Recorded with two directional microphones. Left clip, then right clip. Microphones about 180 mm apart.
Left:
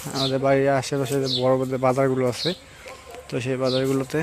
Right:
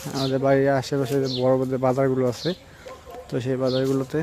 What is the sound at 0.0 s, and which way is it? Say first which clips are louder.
Speech: left 2 dB; centre (ahead or behind).